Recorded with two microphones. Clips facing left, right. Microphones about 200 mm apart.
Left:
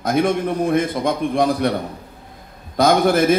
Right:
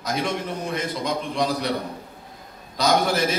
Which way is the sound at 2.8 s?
55° left (ahead or behind).